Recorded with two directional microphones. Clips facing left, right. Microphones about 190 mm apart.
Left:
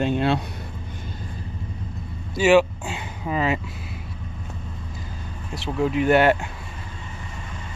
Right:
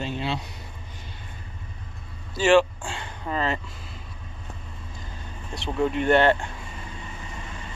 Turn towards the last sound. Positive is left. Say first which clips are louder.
# left 2 dB
turn(degrees=10)  # may be behind; listen again after turning